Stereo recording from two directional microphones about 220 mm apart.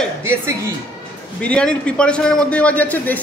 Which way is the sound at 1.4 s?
5° left (ahead or behind).